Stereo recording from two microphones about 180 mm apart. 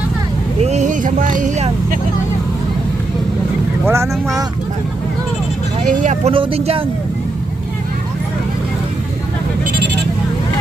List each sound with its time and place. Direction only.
0.6 s speech: 40° right (ahead or behind)
3.8 s speech: 15° right (ahead or behind)
5.8 s speech: 45° right (ahead or behind)
6.3 s speech: 30° right (ahead or behind)